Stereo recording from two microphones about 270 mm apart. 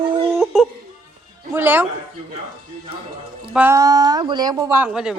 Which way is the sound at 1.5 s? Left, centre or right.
Centre.